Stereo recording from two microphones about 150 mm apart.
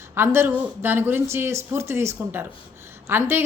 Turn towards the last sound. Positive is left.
turn(degrees=-15)  # may be behind; listen again after turning